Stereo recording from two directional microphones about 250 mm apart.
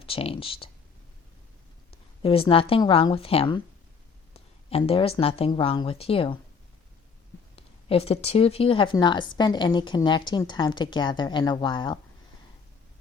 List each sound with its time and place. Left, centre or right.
0.0 s speech: left
1.9 s a woman's voice: left
7.5 s speech: left